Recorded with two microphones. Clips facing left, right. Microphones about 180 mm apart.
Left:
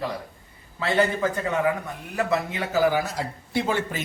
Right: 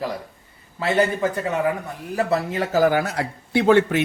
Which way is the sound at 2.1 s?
35° right (ahead or behind).